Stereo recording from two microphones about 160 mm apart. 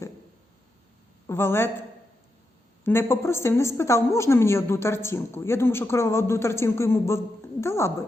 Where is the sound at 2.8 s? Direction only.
15° left (ahead or behind).